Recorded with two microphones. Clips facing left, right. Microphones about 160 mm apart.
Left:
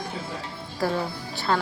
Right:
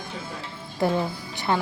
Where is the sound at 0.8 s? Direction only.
20° right (ahead or behind).